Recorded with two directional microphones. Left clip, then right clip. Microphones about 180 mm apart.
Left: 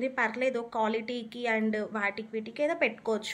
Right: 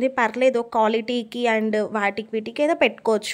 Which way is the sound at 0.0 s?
55° right (ahead or behind).